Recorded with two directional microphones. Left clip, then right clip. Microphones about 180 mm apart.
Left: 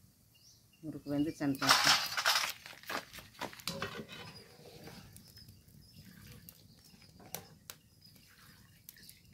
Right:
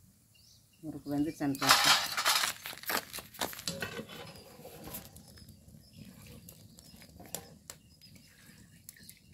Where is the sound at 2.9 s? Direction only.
60° right (ahead or behind).